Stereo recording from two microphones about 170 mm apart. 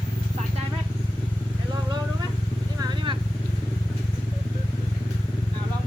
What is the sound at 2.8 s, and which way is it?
Vehicle, 30° right (ahead or behind).